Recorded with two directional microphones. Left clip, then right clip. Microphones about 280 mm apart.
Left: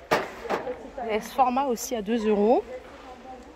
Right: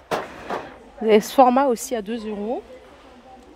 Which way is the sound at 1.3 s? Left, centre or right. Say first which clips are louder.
Right 5 dB; right.